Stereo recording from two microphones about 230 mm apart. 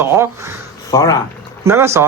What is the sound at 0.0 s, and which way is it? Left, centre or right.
Speech, centre.